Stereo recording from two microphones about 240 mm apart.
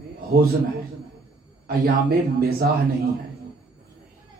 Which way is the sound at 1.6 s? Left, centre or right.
Right.